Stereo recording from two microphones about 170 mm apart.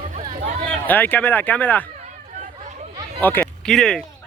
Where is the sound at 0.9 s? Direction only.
10° left (ahead or behind).